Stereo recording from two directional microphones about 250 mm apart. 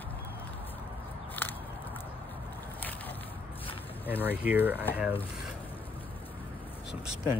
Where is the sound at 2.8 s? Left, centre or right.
Centre.